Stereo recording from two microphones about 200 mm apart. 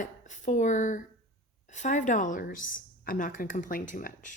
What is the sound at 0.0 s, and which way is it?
Speech, 40° left (ahead or behind).